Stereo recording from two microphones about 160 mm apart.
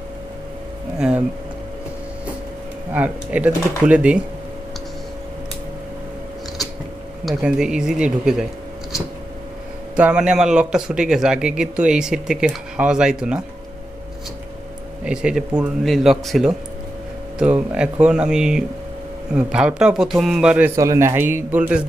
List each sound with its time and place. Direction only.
0.9 s speech: 5° right (ahead or behind)
2.9 s speech: 10° right (ahead or behind)
7.2 s speech: 5° right (ahead or behind)
9.9 s speech: 5° right (ahead or behind)
15.0 s speech: 5° right (ahead or behind)
20.7 s speech: 20° right (ahead or behind)